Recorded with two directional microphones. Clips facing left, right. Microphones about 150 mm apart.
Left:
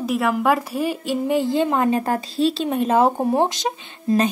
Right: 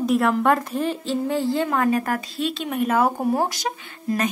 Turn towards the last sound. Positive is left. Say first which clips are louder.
# left 5 dB
turn(degrees=25)  # may be behind; listen again after turning